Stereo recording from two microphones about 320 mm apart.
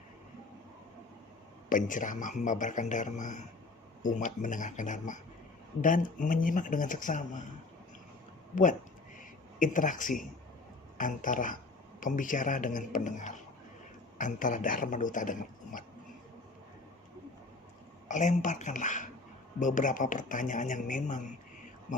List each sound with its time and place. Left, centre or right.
1.7 s speech: left
9.6 s speech: left
18.1 s speech: left